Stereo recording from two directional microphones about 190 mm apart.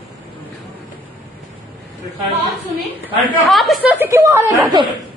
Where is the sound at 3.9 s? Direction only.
10° right (ahead or behind).